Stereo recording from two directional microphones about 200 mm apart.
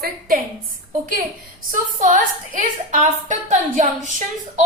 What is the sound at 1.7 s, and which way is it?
A woman's voice, 40° right (ahead or behind).